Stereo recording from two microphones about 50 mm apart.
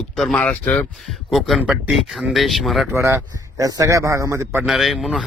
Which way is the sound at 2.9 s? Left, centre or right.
Right.